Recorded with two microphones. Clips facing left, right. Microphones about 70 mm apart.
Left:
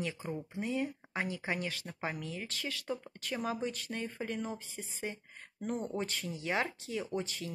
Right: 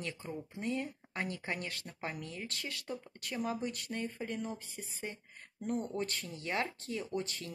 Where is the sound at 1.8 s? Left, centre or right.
Left.